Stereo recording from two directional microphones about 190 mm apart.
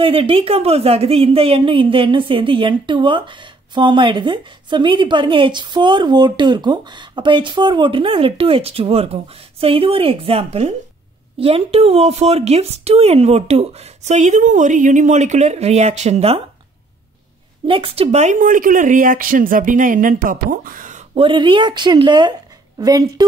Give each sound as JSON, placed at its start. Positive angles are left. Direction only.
{"t": 0.0, "sound": "a woman's voice", "side_deg": -30}
{"t": 17.6, "sound": "speech", "side_deg": -30}
{"t": 21.1, "sound": "a woman's voice", "side_deg": -25}